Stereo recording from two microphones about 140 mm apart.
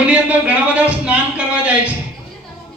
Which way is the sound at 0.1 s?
10° right (ahead or behind).